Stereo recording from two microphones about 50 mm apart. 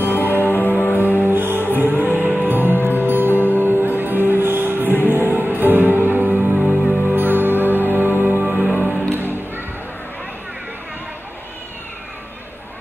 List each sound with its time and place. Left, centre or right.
0.2 s music: right
0.5 s music: left
0.9 s music: right
3.4 s music: left
3.7 s music: right